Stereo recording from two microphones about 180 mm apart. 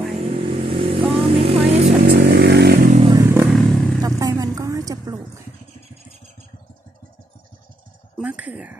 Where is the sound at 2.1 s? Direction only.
70° right (ahead or behind).